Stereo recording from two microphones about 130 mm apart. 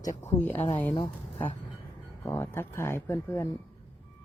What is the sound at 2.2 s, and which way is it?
Speech, 20° left (ahead or behind).